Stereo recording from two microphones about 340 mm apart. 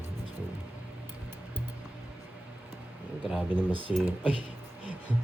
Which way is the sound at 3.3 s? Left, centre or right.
Centre.